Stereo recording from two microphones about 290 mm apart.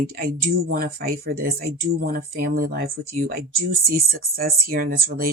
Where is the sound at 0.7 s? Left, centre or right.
Right.